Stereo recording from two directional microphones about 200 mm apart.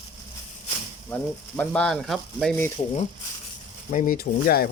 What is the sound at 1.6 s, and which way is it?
Sizzle, 5° left (ahead or behind).